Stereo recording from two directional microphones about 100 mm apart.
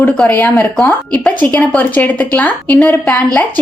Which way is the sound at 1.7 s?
15° left (ahead or behind).